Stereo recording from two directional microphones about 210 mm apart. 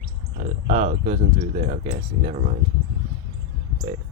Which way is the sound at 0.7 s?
35° right (ahead or behind).